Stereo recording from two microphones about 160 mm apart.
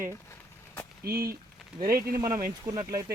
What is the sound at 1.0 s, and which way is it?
Speech, 70° right (ahead or behind).